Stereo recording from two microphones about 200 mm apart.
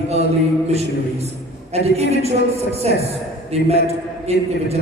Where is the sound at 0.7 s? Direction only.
30° right (ahead or behind).